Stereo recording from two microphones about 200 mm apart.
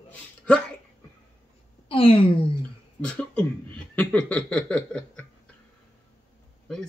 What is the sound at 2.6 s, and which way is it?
Speech, 5° left (ahead or behind).